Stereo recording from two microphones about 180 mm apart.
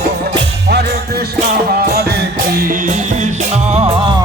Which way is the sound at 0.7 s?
65° right (ahead or behind).